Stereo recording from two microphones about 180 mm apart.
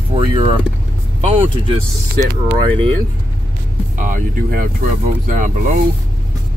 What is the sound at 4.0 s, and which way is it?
Speech, 45° right (ahead or behind).